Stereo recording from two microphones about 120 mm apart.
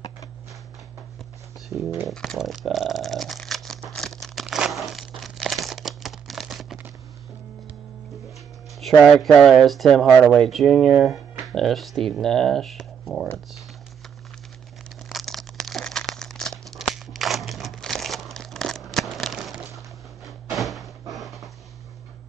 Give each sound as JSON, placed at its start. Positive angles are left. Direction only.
{"t": 1.7, "sound": "speech", "side_deg": -20}
{"t": 2.0, "sound": "a sound", "side_deg": 5}
{"t": 8.8, "sound": "speech", "side_deg": 0}
{"t": 15.0, "sound": "crumpling", "side_deg": 0}
{"t": 20.2, "sound": "door", "side_deg": 0}
{"t": 21.1, "sound": "dog", "side_deg": 0}